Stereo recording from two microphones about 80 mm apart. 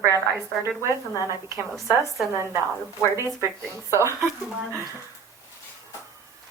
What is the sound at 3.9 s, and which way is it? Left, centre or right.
Speech, right.